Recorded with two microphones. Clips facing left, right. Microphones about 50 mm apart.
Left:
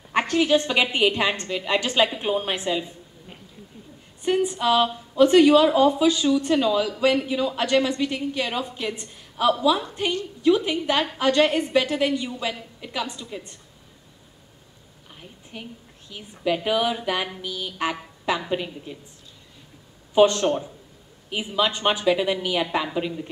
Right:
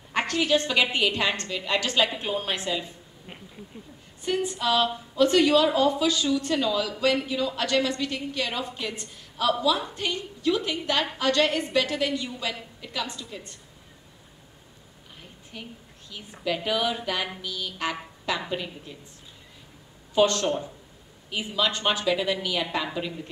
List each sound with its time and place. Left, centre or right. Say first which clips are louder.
0.3 s a woman's voice: left 3 dB; left
4.2 s a woman's voice: left 5 dB; left
15.5 s a woman's voice: left 2 dB; left
20.2 s a woman's voice: left 4 dB; left